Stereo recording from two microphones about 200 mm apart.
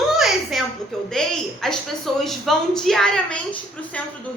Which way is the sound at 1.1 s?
Centre (ahead or behind).